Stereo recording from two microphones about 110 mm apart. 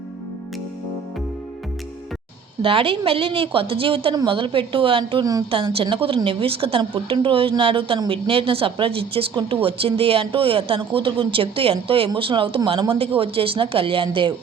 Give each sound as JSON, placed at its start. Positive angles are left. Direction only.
{"t": 2.6, "sound": "a woman's voice", "side_deg": -55}
{"t": 5.2, "sound": "a woman's voice", "side_deg": -35}
{"t": 5.5, "sound": "a woman's voice", "side_deg": -55}